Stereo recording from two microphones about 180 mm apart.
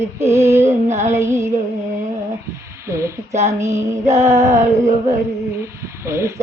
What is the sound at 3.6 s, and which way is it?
Female singing, 15° right (ahead or behind).